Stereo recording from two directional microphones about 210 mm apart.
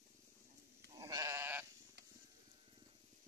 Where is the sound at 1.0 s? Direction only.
15° right (ahead or behind).